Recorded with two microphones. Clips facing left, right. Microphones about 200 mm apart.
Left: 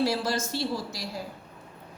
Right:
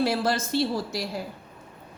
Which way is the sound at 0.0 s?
55° right (ahead or behind).